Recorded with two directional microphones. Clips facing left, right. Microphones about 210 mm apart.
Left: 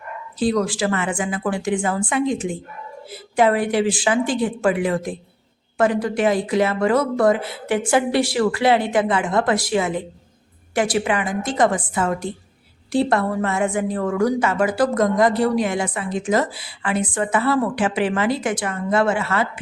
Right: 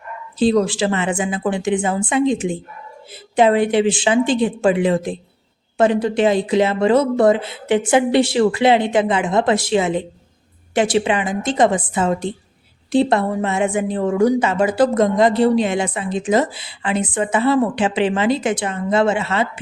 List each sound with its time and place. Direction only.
0.3 s speech: 25° right (ahead or behind)